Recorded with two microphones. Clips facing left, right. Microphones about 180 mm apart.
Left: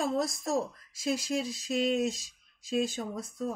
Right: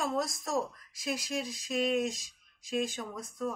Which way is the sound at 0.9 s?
25° left (ahead or behind).